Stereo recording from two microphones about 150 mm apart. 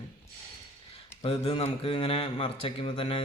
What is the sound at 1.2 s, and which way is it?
Speech, 40° left (ahead or behind).